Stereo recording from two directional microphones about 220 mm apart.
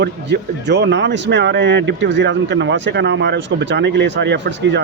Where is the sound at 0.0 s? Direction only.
50° right (ahead or behind).